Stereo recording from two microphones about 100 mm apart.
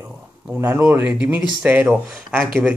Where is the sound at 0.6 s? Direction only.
20° right (ahead or behind).